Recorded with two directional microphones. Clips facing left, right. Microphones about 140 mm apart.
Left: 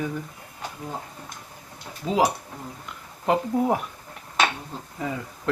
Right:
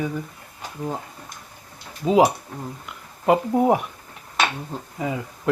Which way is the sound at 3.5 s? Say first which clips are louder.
Right 5 dB; 20° right (ahead or behind).